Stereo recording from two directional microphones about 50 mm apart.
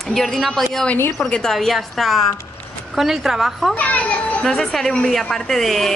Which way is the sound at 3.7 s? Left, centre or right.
Left.